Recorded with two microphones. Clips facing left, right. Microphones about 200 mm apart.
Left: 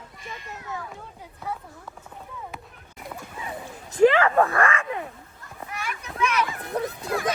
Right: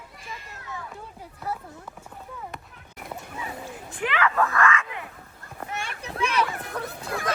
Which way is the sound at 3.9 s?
35° left (ahead or behind).